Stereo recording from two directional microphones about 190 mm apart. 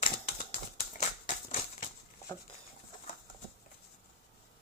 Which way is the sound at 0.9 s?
40° left (ahead or behind).